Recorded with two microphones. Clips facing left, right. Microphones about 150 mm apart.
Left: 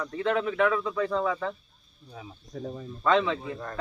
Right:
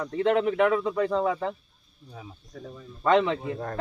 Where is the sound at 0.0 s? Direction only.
20° right (ahead or behind).